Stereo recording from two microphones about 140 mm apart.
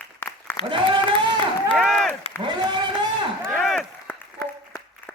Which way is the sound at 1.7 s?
5° left (ahead or behind).